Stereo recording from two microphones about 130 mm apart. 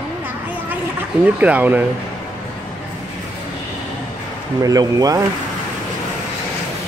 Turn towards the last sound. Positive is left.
turn(degrees=-30)  # may be behind; listen again after turning